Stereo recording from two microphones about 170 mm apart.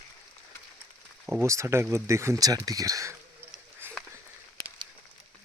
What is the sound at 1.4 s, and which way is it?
Speech, 15° right (ahead or behind).